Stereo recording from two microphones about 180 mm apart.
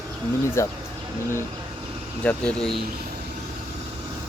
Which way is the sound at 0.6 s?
15° left (ahead or behind).